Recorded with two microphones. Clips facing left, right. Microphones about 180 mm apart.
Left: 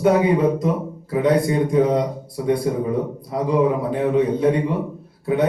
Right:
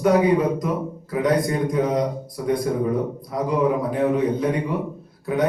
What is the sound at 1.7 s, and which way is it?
A man's voice, 25° left (ahead or behind).